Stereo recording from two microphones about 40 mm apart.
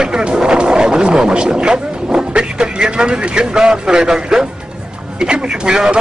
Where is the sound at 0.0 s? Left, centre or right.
Right.